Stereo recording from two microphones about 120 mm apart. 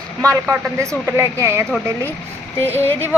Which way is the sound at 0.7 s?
25° right (ahead or behind).